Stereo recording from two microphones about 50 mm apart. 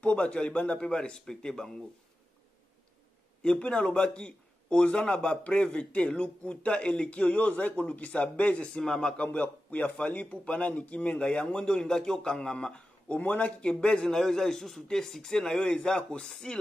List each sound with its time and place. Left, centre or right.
0.0 s speech: left
3.4 s speech: centre
8.6 s speech: centre
14.1 s speech: centre